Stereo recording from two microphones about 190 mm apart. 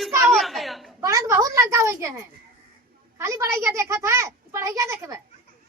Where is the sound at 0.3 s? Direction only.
Centre (ahead or behind).